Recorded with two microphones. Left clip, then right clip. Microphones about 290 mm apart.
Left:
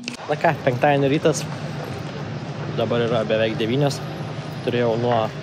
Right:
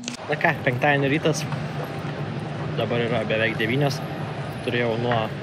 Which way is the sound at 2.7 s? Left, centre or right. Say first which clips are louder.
Left 4 dB; centre.